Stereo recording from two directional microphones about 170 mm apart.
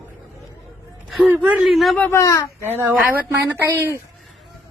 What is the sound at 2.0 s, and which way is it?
Speech, 20° left (ahead or behind).